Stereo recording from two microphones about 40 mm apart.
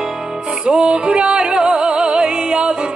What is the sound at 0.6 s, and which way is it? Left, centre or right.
Music, right.